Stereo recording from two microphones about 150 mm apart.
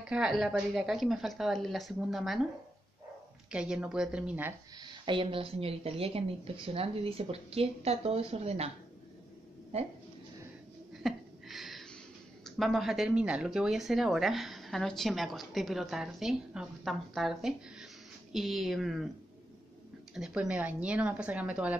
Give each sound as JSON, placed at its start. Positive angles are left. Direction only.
{"t": 0.0, "sound": "a woman's voice", "side_deg": -5}
{"t": 3.4, "sound": "speech", "side_deg": -5}
{"t": 4.7, "sound": "a woman's voice", "side_deg": -30}
{"t": 11.0, "sound": "a sound", "side_deg": 0}
{"t": 12.4, "sound": "a woman's voice", "side_deg": 0}
{"t": 20.2, "sound": "speech", "side_deg": -5}